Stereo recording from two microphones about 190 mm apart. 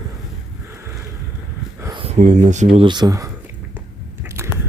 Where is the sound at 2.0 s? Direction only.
35° right (ahead or behind); by 3.2 s 20° right (ahead or behind).